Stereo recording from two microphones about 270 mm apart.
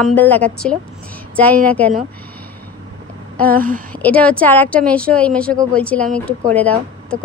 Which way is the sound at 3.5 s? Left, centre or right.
Right.